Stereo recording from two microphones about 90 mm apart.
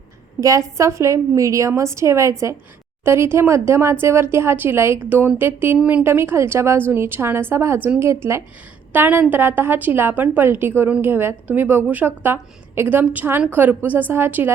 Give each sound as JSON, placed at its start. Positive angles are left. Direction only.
{"t": 0.3, "sound": "a woman's voice", "side_deg": -35}
{"t": 8.9, "sound": "a woman's voice", "side_deg": -20}